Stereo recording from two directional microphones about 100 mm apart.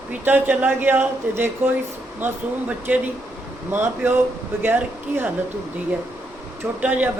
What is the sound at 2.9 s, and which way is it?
Speech, 15° right (ahead or behind).